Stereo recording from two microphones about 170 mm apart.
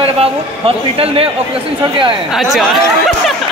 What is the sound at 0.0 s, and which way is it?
A man's voice, 35° right (ahead or behind).